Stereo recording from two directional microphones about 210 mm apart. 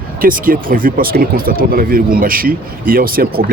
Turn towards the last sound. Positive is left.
turn(degrees=-45)  # may be behind; listen again after turning